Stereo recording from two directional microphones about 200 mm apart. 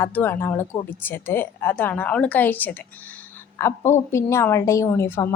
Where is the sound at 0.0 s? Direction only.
10° left (ahead or behind).